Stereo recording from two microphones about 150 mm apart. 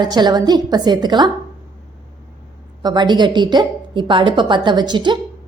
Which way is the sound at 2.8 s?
30° right (ahead or behind).